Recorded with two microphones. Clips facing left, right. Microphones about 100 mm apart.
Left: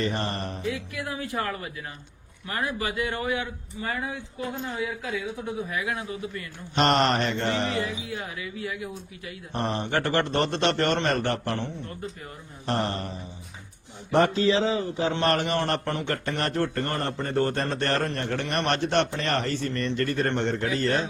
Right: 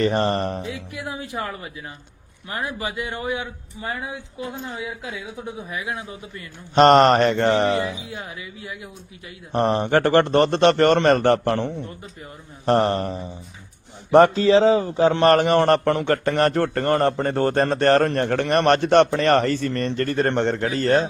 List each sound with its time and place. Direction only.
0.0 s a man's voice: 55° right (ahead or behind)
0.6 s speech: 20° right (ahead or behind)
5.7 s speech: 20° right (ahead or behind)
6.7 s a man's voice: 50° right (ahead or behind)
7.3 s music: 90° right
7.8 s speech: 20° right (ahead or behind)
9.5 s a man's voice: 50° right (ahead or behind)
11.3 s a man's voice: 65° right (ahead or behind)
12.6 s a man's voice: 55° right (ahead or behind)
14.3 s a man's voice: 40° right (ahead or behind); by 16.5 s 60° right (ahead or behind)
16.5 s a man's voice: 70° right (ahead or behind); by 21.1 s 45° right (ahead or behind)